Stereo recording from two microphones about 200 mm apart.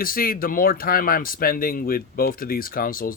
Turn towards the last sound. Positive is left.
turn(degrees=45)  # may be behind; listen again after turning